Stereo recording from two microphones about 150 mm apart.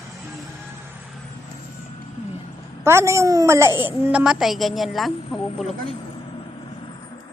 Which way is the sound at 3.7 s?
30° left (ahead or behind).